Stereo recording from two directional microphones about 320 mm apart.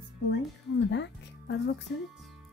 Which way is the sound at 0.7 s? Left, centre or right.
Left.